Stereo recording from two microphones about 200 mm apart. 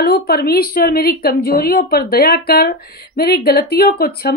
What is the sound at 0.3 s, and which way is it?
Speech, 50° left (ahead or behind).